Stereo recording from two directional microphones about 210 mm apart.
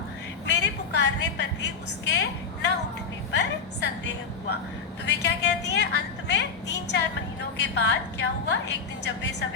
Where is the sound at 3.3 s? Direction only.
55° left (ahead or behind).